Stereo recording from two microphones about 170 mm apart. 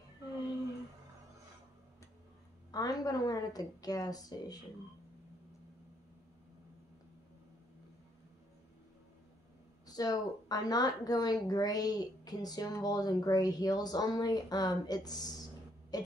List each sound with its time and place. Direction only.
2.7 s a woman's voice: 20° left (ahead or behind)
9.8 s a woman's voice: 25° left (ahead or behind)